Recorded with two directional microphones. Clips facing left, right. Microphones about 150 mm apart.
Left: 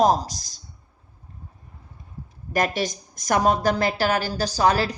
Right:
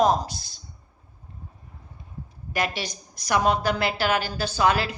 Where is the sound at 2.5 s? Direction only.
45° left (ahead or behind).